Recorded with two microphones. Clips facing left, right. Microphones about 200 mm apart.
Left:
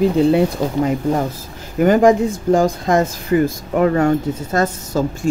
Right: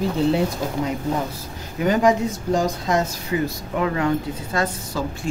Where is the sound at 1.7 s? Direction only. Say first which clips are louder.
Left 6 dB; 50° left (ahead or behind).